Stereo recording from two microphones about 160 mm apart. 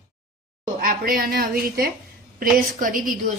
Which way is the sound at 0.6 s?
55° right (ahead or behind).